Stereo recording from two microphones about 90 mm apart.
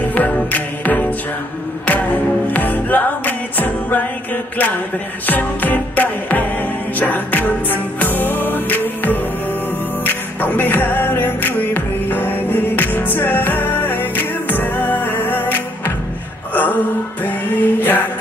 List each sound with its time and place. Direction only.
0.1 s music: 20° left (ahead or behind)